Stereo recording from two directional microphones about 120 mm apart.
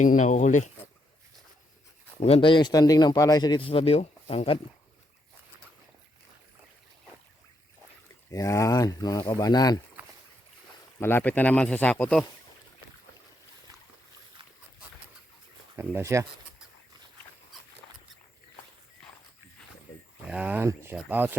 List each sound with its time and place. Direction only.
0.0 s speech: 90° left
2.2 s speech: 50° left (ahead or behind)
3.7 s speech: 55° left (ahead or behind)
8.3 s speech: 25° left (ahead or behind)
11.0 s speech: 15° left (ahead or behind)
15.7 s speech: 20° right (ahead or behind)
20.2 s speech: 10° right (ahead or behind)